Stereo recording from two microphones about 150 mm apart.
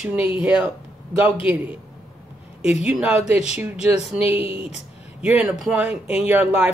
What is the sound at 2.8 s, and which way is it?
Speech, 5° right (ahead or behind).